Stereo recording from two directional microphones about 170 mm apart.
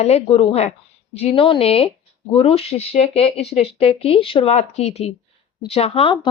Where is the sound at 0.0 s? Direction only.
35° left (ahead or behind).